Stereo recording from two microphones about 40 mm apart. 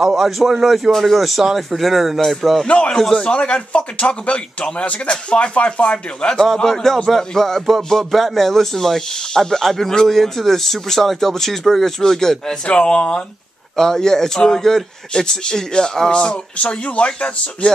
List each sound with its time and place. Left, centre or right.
0.0 s speech: centre
0.9 s speech: centre
1.2 s speech: centre
3.3 s speech: left
6.4 s speech: centre
12.6 s speech: left
13.7 s speech: centre; by 17.6 s left